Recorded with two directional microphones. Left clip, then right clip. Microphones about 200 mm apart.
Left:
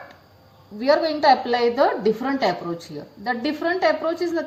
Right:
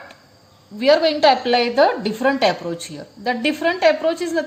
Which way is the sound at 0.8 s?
50° right (ahead or behind).